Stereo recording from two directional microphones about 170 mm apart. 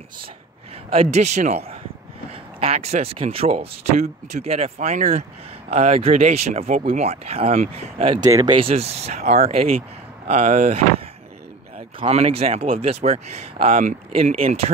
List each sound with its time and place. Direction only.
0.9 s speech: 40° right (ahead or behind)
8.3 s speech: 20° right (ahead or behind)
8.5 s speech: 35° right (ahead or behind)
12.0 s speech: 35° right (ahead or behind)